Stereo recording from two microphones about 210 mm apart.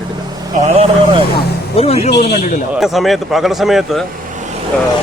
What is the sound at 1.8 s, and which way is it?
Speech, 30° left (ahead or behind).